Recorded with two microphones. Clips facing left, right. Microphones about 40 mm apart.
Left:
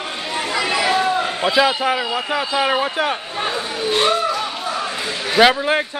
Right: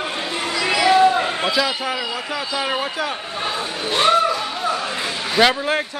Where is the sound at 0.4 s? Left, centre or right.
Left.